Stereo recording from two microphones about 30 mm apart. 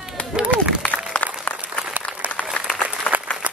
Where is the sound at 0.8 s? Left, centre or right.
Left.